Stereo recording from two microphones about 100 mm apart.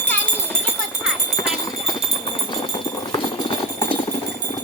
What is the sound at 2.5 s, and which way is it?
Music, 60° left (ahead or behind).